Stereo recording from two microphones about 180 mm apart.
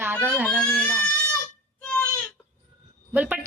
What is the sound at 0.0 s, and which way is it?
Baby cry, 10° right (ahead or behind).